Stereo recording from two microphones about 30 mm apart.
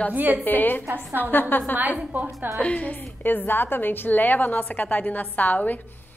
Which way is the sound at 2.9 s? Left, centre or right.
Left.